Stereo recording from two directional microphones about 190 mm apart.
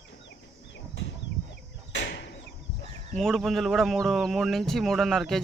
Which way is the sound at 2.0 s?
65° left (ahead or behind).